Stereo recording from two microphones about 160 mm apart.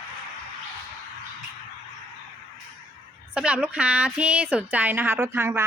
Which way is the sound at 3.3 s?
5° right (ahead or behind).